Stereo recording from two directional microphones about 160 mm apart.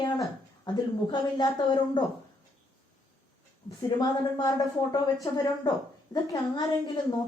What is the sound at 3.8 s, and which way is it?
A child's voice, 25° left (ahead or behind).